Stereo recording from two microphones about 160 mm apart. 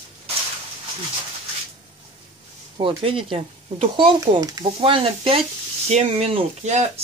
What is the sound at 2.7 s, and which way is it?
Speech, 35° right (ahead or behind).